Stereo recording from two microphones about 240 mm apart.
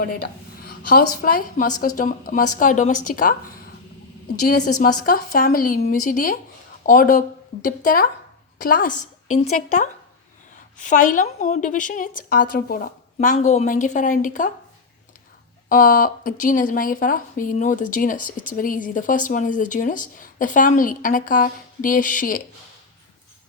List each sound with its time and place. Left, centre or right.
0.0 s speech: left
5.0 s a woman's voice: left
15.7 s speech: left